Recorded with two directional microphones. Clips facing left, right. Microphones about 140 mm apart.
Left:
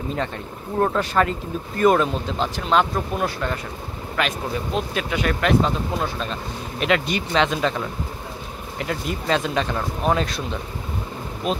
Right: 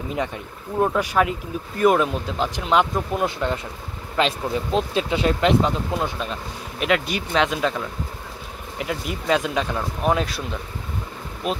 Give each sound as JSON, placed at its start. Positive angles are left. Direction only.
{"t": 0.7, "sound": "speech", "side_deg": -10}
{"t": 6.8, "sound": "speech", "side_deg": -5}
{"t": 11.4, "sound": "speech", "side_deg": -5}